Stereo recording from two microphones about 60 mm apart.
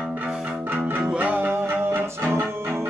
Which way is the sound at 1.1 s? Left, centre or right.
Right.